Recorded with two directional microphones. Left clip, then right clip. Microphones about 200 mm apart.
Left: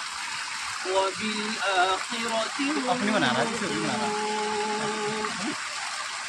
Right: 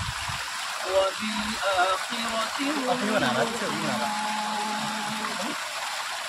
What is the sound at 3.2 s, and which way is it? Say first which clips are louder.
Speech: even; 5° right (ahead or behind).